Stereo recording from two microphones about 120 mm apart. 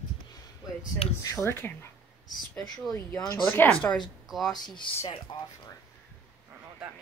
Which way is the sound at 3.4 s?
15° left (ahead or behind).